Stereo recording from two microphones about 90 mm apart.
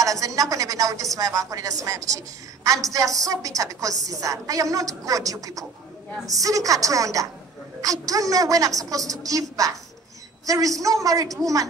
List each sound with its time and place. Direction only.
0.0 s a woman's voice: 40° right (ahead or behind)